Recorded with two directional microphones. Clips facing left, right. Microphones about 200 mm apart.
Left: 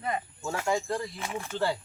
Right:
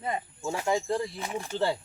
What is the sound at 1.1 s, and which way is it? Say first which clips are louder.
Speech: right 2 dB; 35° right (ahead or behind).